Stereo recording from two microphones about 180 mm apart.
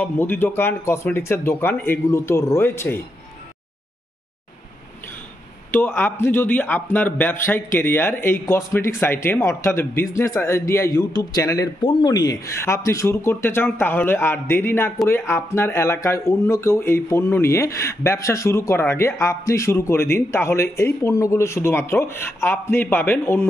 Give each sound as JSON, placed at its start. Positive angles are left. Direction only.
{"t": 0.0, "sound": "speech", "side_deg": 10}
{"t": 5.7, "sound": "a man's voice", "side_deg": 10}